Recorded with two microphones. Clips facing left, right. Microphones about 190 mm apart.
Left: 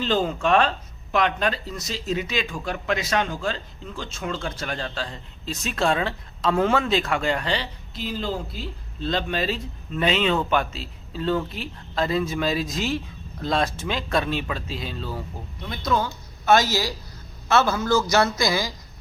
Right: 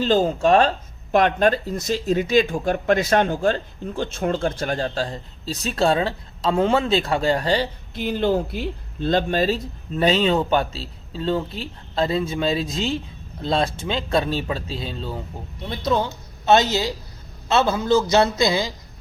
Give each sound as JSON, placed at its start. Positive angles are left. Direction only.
{"t": 0.0, "sound": "speech", "side_deg": -45}